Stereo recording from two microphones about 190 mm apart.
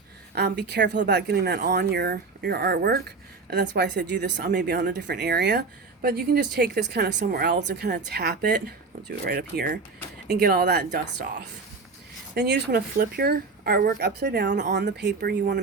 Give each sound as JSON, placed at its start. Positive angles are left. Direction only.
{"t": 0.3, "sound": "speech", "side_deg": -60}
{"t": 12.3, "sound": "speech", "side_deg": -60}